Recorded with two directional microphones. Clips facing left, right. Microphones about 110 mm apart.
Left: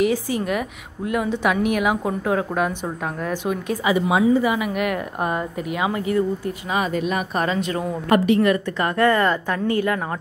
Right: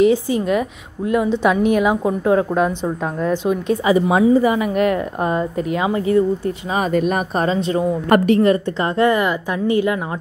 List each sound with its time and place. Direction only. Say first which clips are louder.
0.0 s speech: right 6 dB; 20° right (ahead or behind)
3.9 s a woman's voice: right 4 dB; 40° right (ahead or behind)
6.9 s speech: right 5 dB; 45° right (ahead or behind)
7.4 s speech: right 5 dB; 30° right (ahead or behind)